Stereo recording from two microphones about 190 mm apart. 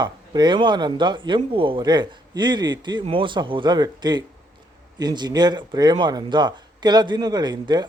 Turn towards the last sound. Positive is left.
turn(degrees=-20)  # may be behind; listen again after turning